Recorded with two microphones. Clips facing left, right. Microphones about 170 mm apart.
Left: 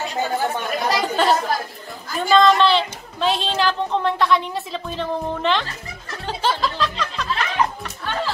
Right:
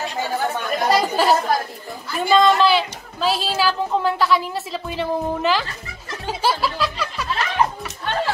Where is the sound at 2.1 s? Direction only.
5° right (ahead or behind).